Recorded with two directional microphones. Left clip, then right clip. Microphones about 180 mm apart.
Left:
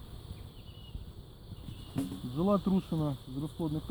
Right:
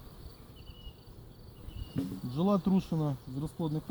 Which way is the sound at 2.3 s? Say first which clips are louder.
Even; 30° right (ahead or behind).